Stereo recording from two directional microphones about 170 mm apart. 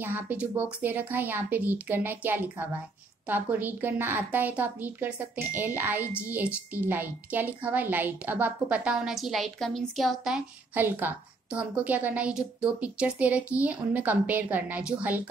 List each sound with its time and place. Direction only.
0.0 s a woman's voice: 10° right (ahead or behind)
6.0 s a woman's voice: 15° left (ahead or behind)
6.7 s a woman's voice: 10° right (ahead or behind)